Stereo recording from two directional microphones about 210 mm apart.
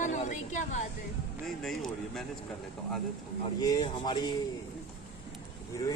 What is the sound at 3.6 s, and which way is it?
Speech, 20° left (ahead or behind).